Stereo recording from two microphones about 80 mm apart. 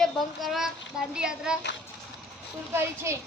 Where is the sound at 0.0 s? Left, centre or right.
Centre.